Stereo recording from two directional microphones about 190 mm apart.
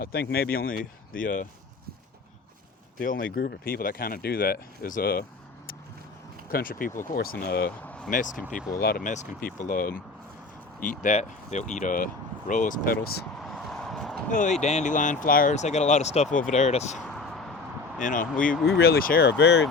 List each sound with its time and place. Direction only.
0.0 s speech: 55° left (ahead or behind)
3.0 s speech: 45° left (ahead or behind)
6.5 s speech: 50° left (ahead or behind)
7.9 s vehicle: 5° left (ahead or behind)
8.1 s speech: 40° left (ahead or behind)
8.4 s speech: 5° left (ahead or behind)
8.8 s speech: 50° left (ahead or behind)
13.4 s a sound: centre (ahead or behind)
14.3 s speech: 40° left (ahead or behind)
17.1 s a sound: centre (ahead or behind)
18.0 s speech: 45° left (ahead or behind); by 19.6 s 60° left (ahead or behind)